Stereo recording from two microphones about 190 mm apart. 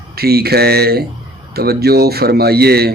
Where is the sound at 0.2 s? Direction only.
55° right (ahead or behind).